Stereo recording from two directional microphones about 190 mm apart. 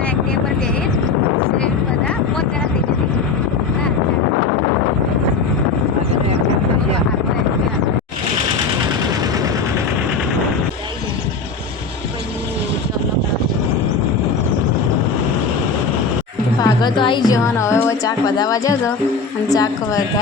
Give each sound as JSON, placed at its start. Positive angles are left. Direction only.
{"t": 16.6, "sound": "a woman's voice", "side_deg": 20}